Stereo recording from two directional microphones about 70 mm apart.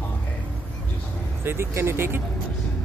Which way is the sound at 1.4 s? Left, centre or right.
Right.